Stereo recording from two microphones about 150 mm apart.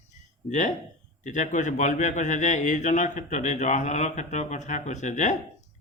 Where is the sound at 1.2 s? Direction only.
55° left (ahead or behind).